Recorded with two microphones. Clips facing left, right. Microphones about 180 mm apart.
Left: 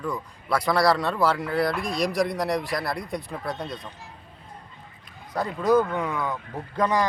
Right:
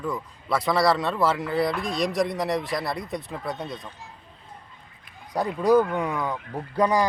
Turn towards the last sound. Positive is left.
turn(degrees=-10)  # may be behind; listen again after turning